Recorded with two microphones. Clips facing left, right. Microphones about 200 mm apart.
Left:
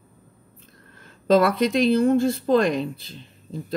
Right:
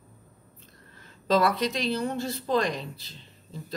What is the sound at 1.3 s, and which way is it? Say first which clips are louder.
Speech: left 6 dB; 55° left (ahead or behind).